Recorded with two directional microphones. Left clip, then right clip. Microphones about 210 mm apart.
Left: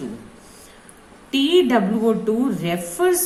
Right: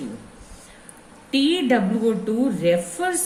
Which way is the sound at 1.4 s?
20° left (ahead or behind).